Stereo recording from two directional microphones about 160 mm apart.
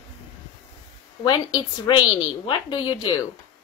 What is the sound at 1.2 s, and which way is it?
Speech, 25° left (ahead or behind).